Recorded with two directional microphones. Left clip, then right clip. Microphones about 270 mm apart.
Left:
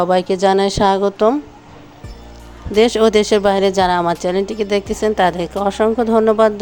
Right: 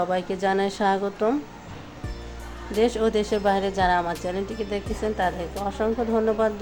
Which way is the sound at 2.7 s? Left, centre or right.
Left.